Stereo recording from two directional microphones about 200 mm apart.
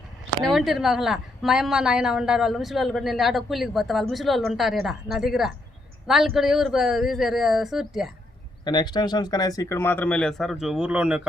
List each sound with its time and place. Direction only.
0.4 s a woman's voice: centre (ahead or behind)
8.6 s speech: 20° left (ahead or behind); by 11.3 s 5° right (ahead or behind)